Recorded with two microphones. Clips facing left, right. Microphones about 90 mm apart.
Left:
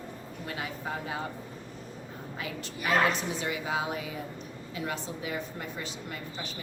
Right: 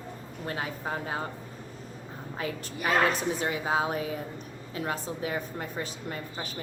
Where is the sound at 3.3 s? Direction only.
40° right (ahead or behind).